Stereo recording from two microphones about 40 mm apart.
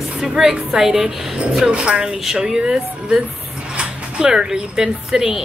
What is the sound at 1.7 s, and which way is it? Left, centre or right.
Speech, right.